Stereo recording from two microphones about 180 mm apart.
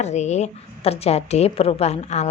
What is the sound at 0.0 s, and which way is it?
Speech, 40° left (ahead or behind).